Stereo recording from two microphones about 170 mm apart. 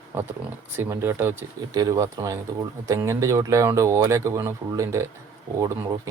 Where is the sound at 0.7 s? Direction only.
15° right (ahead or behind).